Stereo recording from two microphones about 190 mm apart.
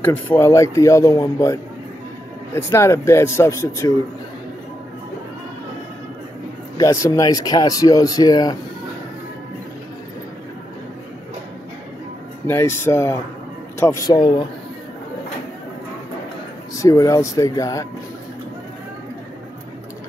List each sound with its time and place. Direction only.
0.0 s speech: 15° left (ahead or behind)
6.8 s speech: 15° left (ahead or behind)
12.4 s speech: 10° left (ahead or behind)
16.7 s speech: 15° left (ahead or behind)